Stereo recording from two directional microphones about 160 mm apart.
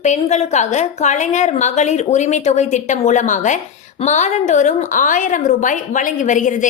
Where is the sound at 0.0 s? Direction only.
45° left (ahead or behind).